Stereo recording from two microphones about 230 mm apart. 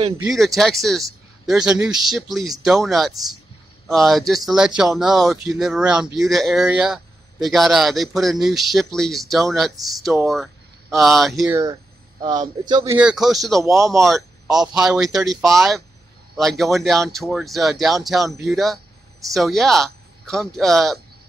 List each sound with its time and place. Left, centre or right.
0.2 s a man's voice: centre
11.4 s speech: centre
13.6 s speech: centre
14.0 s a man's voice: centre